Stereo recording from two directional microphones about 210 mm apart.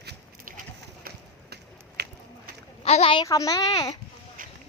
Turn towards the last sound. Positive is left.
turn(degrees=-40)  # may be behind; listen again after turning